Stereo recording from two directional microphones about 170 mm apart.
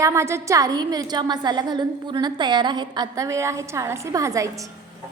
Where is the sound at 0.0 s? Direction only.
15° right (ahead or behind).